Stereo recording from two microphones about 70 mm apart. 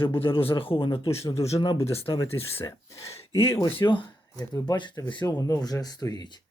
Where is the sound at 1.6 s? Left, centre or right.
Left.